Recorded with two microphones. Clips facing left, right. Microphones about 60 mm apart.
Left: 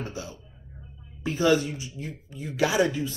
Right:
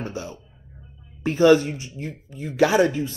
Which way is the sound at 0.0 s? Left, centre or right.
Right.